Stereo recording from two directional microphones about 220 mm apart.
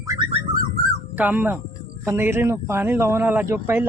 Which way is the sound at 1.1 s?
5° right (ahead or behind).